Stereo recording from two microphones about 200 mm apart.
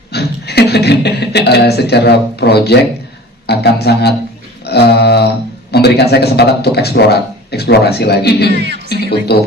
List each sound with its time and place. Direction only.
0.1 s a man's voice: 55° left (ahead or behind)
8.5 s speech: 55° right (ahead or behind)
8.9 s a man's voice: 55° left (ahead or behind)